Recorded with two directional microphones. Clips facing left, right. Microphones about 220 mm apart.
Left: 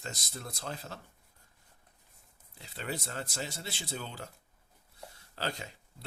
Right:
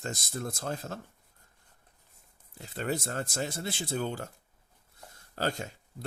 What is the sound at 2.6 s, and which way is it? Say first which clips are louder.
Speech: right 6 dB; 50° right (ahead or behind).